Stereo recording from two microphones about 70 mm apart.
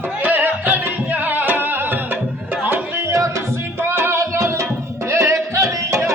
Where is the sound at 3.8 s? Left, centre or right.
Right.